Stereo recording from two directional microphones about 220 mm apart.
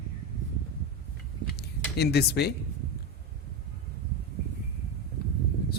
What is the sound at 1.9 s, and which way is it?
Speech, 45° left (ahead or behind).